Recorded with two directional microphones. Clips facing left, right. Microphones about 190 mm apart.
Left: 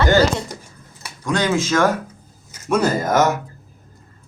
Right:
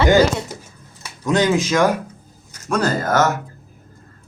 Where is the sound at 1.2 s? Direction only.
20° right (ahead or behind).